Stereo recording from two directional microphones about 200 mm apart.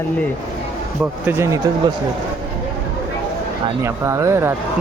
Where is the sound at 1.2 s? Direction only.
15° right (ahead or behind).